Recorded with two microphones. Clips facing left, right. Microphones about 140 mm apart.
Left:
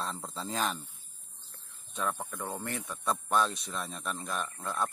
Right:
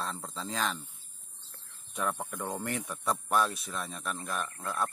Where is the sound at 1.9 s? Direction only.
10° right (ahead or behind).